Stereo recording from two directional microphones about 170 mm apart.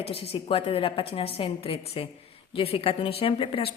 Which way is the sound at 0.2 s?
35° left (ahead or behind).